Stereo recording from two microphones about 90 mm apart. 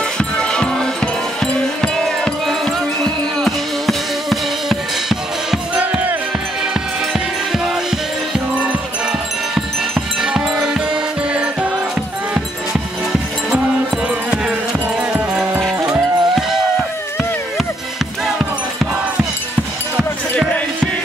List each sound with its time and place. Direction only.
0.4 s music: 10° left (ahead or behind)
5.8 s music: 15° right (ahead or behind)
10.2 s music: 10° right (ahead or behind)
15.9 s music: centre (ahead or behind)